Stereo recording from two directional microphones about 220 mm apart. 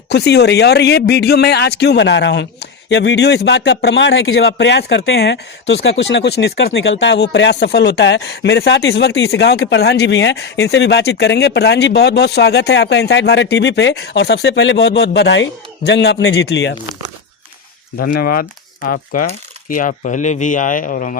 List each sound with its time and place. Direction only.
0.1 s speech: 50° left (ahead or behind)
17.9 s speech: 45° left (ahead or behind)